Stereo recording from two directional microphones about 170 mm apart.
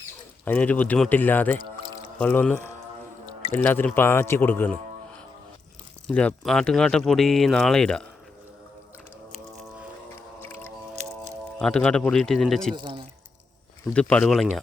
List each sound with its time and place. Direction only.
0.4 s speech: 10° left (ahead or behind)
9.3 s vehicle: centre (ahead or behind)
11.6 s speech: 5° left (ahead or behind)
12.7 s speech: 30° right (ahead or behind)
13.9 s speech: 5° left (ahead or behind)